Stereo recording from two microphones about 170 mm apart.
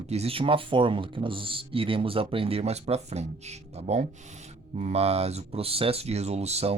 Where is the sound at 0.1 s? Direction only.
35° right (ahead or behind).